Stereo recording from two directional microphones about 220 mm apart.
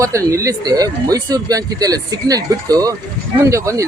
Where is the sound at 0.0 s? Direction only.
15° right (ahead or behind).